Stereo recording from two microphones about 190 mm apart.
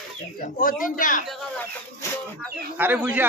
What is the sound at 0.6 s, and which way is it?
Speech, 45° left (ahead or behind).